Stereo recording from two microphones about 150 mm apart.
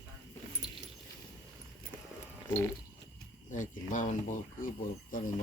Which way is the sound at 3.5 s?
60° left (ahead or behind).